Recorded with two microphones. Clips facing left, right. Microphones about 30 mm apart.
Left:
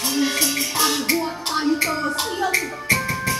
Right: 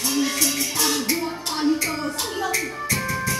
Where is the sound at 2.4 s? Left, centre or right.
Centre.